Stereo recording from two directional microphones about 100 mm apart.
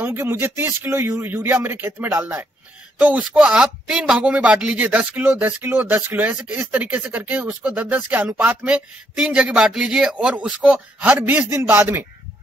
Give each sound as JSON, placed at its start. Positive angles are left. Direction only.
{"t": 0.0, "sound": "a man's voice", "side_deg": -20}